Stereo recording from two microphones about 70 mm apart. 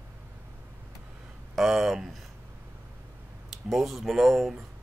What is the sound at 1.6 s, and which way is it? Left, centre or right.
Speech, centre.